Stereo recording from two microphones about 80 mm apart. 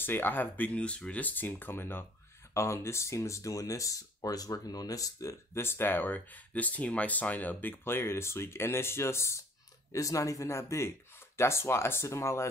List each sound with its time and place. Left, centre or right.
0.0 s speech: left
5.5 s speech: left